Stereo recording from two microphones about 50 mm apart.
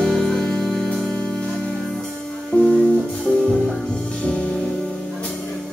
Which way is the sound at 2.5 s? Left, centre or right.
Centre.